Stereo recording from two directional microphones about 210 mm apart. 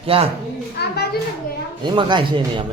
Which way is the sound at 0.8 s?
50° left (ahead or behind).